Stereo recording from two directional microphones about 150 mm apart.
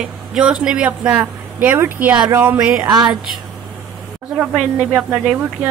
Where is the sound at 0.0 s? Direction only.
5° right (ahead or behind).